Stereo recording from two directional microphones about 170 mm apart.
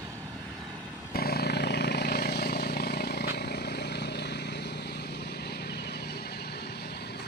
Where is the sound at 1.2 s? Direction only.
65° left (ahead or behind).